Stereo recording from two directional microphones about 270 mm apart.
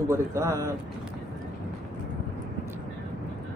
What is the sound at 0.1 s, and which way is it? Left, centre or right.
Speech, centre.